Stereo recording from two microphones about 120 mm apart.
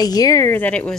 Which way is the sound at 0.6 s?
10° left (ahead or behind).